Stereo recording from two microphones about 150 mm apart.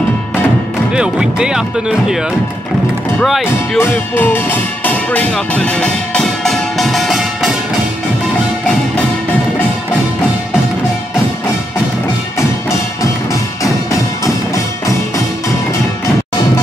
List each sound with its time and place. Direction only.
0.9 s speech: 5° right (ahead or behind)
3.2 s speech: centre (ahead or behind)
3.7 s music: 15° left (ahead or behind); by 7.5 s centre (ahead or behind)
12.6 s music: 20° left (ahead or behind)